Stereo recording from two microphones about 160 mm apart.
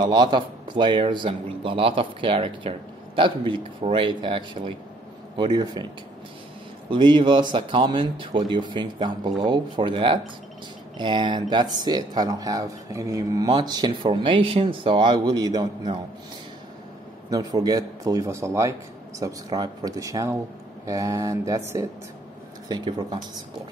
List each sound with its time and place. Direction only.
0.0 s a man's voice: 25° right (ahead or behind)
6.9 s a man's voice: 30° right (ahead or behind)
17.3 s speech: 25° right (ahead or behind)